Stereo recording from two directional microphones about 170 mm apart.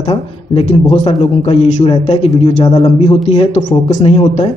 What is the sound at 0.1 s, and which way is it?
A man's voice, 35° left (ahead or behind).